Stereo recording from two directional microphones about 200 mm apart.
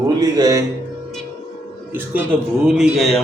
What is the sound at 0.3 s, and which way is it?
Music, 20° right (ahead or behind).